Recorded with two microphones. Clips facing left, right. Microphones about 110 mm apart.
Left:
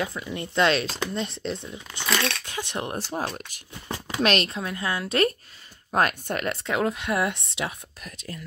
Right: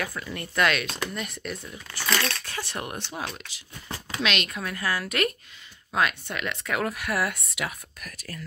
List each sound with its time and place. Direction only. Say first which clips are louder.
0.0 s speech: left 3 dB; 20° left (ahead or behind)
2.0 s speech: left 1 dB; centre (ahead or behind)
2.4 s speech: left 3 dB; 20° left (ahead or behind)
3.0 s speech: left 5 dB; 40° left (ahead or behind)
4.5 s speech: left 1 dB; 25° left (ahead or behind)
5.9 s speech: left 3 dB; 45° left (ahead or behind)
6.6 s speech: left 3 dB; 25° left (ahead or behind)